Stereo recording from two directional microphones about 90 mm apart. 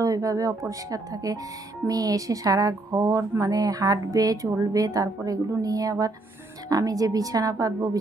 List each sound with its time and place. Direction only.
0.0 s speech: 40° right (ahead or behind)